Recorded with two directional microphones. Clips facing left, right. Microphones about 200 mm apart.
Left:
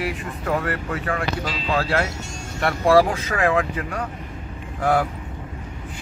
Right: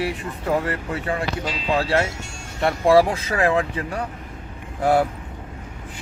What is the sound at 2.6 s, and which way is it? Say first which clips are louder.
Speech: right 1 dB; 20° right (ahead or behind).